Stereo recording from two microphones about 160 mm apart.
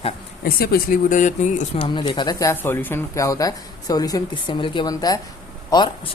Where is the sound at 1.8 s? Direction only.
30° left (ahead or behind).